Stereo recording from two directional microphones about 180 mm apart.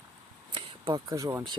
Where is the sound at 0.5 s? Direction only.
25° right (ahead or behind).